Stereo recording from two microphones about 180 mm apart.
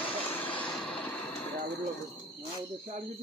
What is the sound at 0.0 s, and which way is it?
Vehicle, 10° left (ahead or behind).